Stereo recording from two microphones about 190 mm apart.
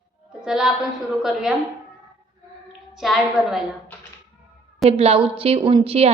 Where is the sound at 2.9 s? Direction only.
Centre (ahead or behind).